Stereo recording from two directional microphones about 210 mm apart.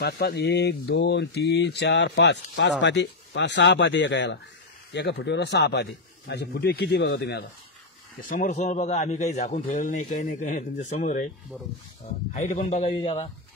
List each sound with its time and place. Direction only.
0.0 s speech: 50° left (ahead or behind)
8.2 s a man's voice: 40° left (ahead or behind)
11.5 s speech: centre (ahead or behind)
12.4 s a man's voice: 35° left (ahead or behind)